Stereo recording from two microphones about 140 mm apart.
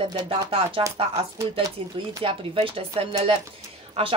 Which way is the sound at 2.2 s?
40° right (ahead or behind).